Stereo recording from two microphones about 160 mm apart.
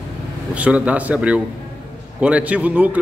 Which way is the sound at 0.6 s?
10° right (ahead or behind).